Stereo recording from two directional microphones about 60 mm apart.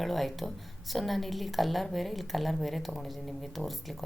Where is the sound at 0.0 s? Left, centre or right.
Centre.